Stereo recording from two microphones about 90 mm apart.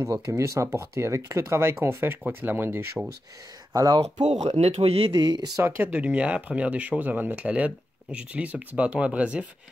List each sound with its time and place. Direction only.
0.0 s speech: 35° right (ahead or behind)
3.7 s speech: 45° right (ahead or behind)
4.8 s speech: 90° right
5.1 s speech: 55° right (ahead or behind)
5.6 s speech: 25° right (ahead or behind)